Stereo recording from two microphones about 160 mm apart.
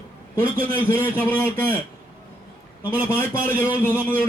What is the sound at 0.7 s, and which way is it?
Speech, 15° left (ahead or behind).